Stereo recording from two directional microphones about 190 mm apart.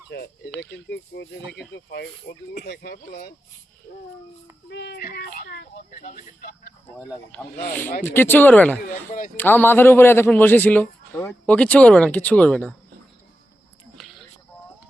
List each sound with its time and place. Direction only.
0.1 s speech: 55° left (ahead or behind)
4.7 s speech: 65° left (ahead or behind)
8.0 s a man's voice: 10° left (ahead or behind)
8.8 s speech: 45° left (ahead or behind)
9.4 s a man's voice: 10° left (ahead or behind)